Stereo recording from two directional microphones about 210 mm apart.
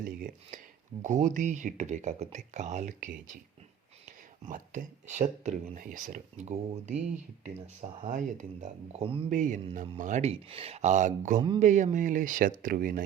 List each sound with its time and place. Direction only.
0.0 s speech: 45° right (ahead or behind)
4.4 s speech: 35° right (ahead or behind)
11.3 s speech: 20° right (ahead or behind)
11.6 s speech: 35° right (ahead or behind)